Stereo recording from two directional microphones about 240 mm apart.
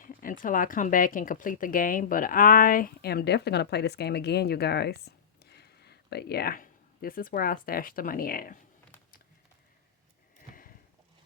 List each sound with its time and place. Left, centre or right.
0.0 s speech: left